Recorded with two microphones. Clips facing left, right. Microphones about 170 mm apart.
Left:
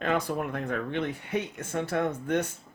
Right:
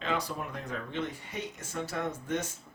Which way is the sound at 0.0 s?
55° left (ahead or behind).